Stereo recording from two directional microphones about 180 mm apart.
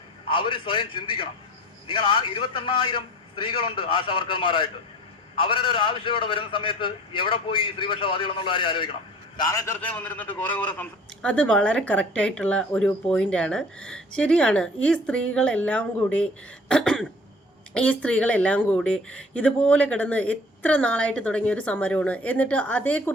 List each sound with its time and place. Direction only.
0.3 s a man's voice: 30° left (ahead or behind)
9.5 s a woman's voice: 15° left (ahead or behind)